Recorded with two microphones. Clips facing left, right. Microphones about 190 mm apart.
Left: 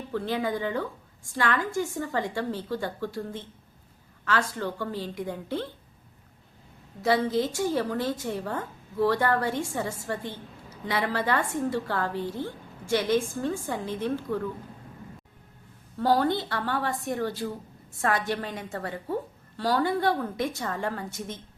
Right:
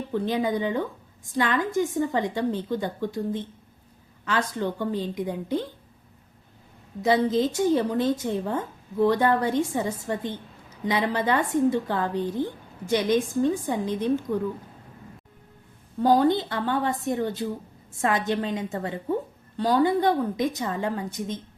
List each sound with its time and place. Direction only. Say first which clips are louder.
0.1 s a woman's voice: right 3 dB; 20° right (ahead or behind)
7.0 s a woman's voice: right 3 dB; 20° right (ahead or behind)
16.0 s a woman's voice: right 4 dB; 15° right (ahead or behind)